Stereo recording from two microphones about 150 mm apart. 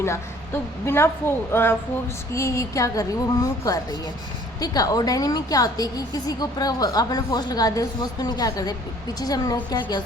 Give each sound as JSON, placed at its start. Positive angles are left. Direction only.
{"t": 0.0, "sound": "a woman's voice", "side_deg": 15}